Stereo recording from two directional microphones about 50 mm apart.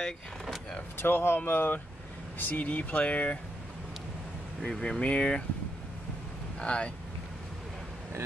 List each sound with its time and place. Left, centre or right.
0.9 s speech: left
4.6 s speech: centre
6.6 s speech: left